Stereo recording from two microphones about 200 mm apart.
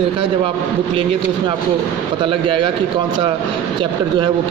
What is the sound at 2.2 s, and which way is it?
Speech, 25° right (ahead or behind).